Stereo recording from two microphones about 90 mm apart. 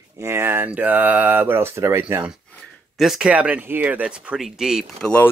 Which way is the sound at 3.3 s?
15° right (ahead or behind).